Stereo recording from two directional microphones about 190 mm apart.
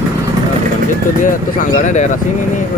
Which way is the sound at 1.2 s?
40° left (ahead or behind).